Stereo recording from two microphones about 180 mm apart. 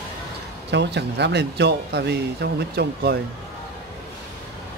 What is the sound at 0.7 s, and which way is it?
A man's voice, 70° right (ahead or behind).